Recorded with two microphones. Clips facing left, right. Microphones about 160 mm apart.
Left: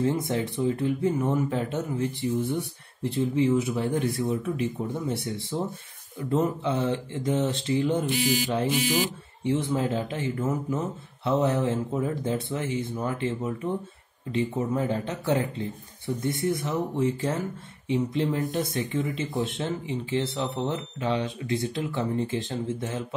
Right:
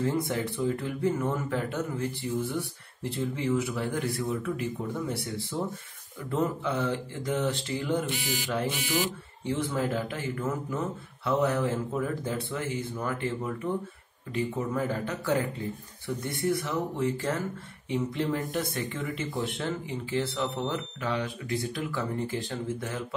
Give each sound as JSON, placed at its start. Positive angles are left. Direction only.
{"t": 0.0, "sound": "speech", "side_deg": 20}